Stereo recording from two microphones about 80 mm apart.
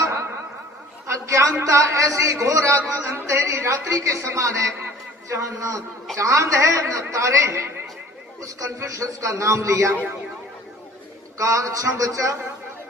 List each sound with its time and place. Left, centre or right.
1.0 s a man's voice: right
9.9 s a man's voice: right
11.3 s a man's voice: right